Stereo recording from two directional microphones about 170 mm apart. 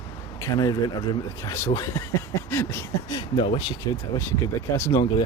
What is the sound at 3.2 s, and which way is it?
Speech, 30° left (ahead or behind).